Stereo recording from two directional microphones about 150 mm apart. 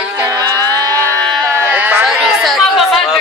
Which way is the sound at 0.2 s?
25° right (ahead or behind).